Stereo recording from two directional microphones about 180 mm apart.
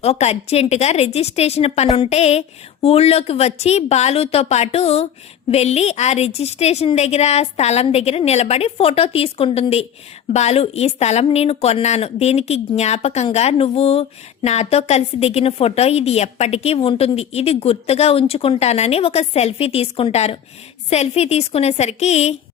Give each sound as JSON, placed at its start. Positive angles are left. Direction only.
{"t": 0.0, "sound": "a woman's voice", "side_deg": 35}